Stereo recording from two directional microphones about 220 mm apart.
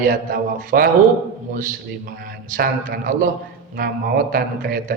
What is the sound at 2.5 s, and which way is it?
Speech, 35° right (ahead or behind).